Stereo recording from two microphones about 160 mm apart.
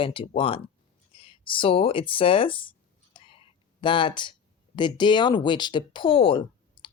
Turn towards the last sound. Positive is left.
turn(degrees=30)  # may be behind; listen again after turning